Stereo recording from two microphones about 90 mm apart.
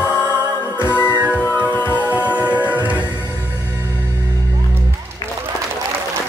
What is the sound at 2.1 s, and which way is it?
Music, 15° right (ahead or behind).